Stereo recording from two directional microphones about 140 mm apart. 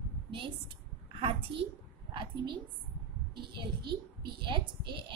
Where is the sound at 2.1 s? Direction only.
35° right (ahead or behind).